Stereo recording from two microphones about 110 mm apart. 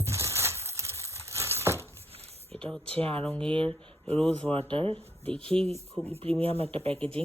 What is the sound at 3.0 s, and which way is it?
Speech, 60° right (ahead or behind).